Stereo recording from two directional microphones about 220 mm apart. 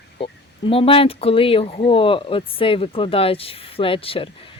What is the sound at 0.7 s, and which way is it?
Speech, 25° left (ahead or behind).